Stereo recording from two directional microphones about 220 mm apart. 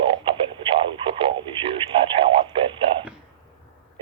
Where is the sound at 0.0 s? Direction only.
25° right (ahead or behind).